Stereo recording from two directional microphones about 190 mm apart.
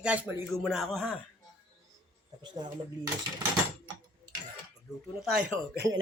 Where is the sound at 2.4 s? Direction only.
20° right (ahead or behind).